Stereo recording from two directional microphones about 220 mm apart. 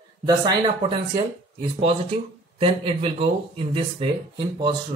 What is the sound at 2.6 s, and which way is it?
Speech, 25° right (ahead or behind).